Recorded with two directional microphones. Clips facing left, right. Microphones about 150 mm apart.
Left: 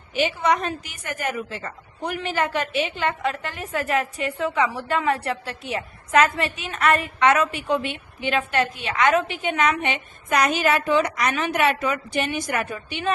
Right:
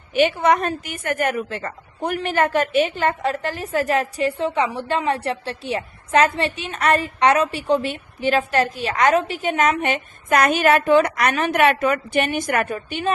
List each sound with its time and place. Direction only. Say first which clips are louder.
0.1 s a woman's voice: right 5 dB; 55° right (ahead or behind)